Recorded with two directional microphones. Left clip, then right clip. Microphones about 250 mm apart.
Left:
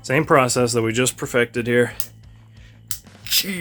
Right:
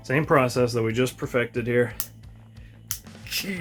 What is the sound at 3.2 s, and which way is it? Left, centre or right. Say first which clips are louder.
Music: left 8 dB; left.